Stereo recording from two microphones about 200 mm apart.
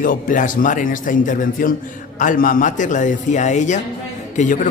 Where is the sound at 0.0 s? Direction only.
40° left (ahead or behind).